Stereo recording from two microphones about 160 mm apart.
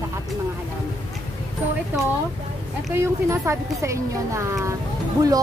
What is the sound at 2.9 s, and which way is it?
A woman's voice, 15° right (ahead or behind).